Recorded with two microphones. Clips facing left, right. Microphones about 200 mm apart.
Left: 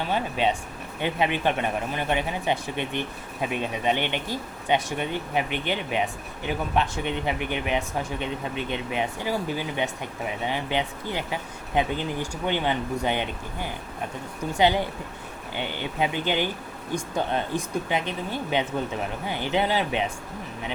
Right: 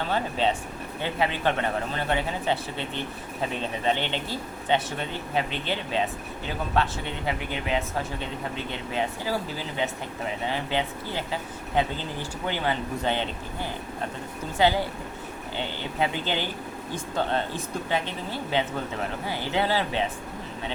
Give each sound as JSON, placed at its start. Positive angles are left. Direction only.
{"t": 0.1, "sound": "a woman's voice", "side_deg": 15}